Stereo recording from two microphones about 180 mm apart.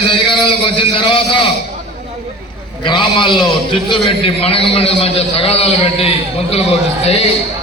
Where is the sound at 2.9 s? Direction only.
25° left (ahead or behind).